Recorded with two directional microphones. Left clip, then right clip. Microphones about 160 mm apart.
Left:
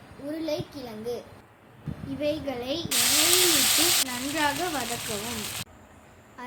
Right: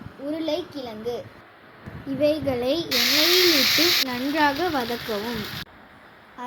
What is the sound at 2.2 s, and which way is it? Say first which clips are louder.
Speech: right 7 dB; 35° right (ahead or behind).